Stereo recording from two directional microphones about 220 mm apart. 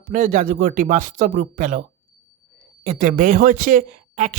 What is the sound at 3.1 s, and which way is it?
Speech, 40° right (ahead or behind).